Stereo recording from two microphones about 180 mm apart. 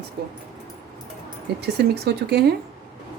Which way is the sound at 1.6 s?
65° right (ahead or behind).